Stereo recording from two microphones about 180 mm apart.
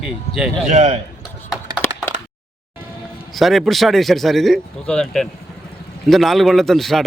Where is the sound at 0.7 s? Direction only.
40° right (ahead or behind).